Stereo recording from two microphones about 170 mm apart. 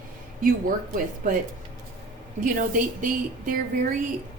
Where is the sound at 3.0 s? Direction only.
55° right (ahead or behind).